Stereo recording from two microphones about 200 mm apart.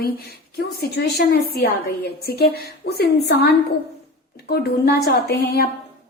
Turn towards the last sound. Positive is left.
turn(degrees=50)  # may be behind; listen again after turning